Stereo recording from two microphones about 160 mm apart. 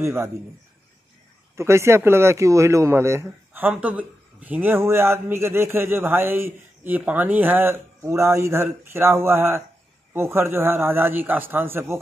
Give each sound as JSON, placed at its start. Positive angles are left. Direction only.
{"t": 0.0, "sound": "speech", "side_deg": -15}
{"t": 1.6, "sound": "speech", "side_deg": -15}